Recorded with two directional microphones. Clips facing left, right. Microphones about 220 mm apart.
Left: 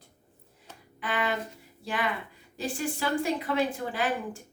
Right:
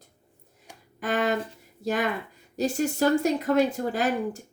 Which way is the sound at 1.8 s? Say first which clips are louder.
Right 5 dB; 45° right (ahead or behind).